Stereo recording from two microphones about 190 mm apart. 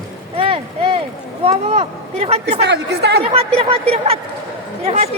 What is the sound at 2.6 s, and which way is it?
Speech, 60° right (ahead or behind).